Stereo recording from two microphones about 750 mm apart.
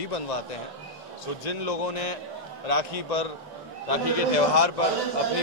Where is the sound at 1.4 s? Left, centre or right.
Left.